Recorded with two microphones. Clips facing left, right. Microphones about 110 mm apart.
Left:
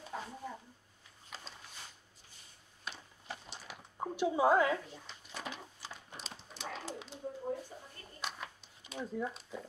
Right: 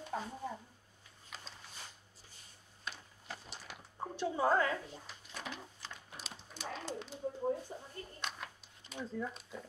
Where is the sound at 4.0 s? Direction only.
15° left (ahead or behind).